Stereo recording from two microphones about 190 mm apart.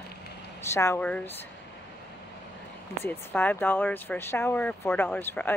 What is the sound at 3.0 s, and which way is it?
Speech, 10° left (ahead or behind).